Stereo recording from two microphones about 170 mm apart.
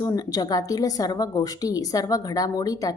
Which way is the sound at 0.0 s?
20° left (ahead or behind).